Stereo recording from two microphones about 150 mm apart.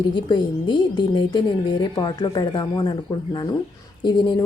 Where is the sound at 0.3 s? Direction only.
30° left (ahead or behind).